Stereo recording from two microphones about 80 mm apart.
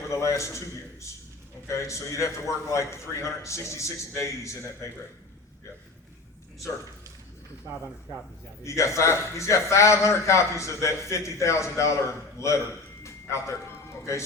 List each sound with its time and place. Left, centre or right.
0.1 s a man's voice: left
1.6 s a man's voice: left
8.6 s a man's voice: left